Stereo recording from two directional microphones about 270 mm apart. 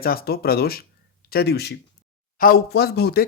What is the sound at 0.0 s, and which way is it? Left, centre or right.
Speech, left.